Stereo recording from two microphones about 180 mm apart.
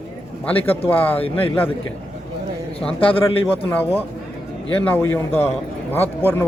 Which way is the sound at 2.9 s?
30° left (ahead or behind).